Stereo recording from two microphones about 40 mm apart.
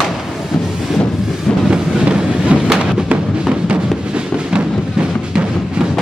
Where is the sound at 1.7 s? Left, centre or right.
Right.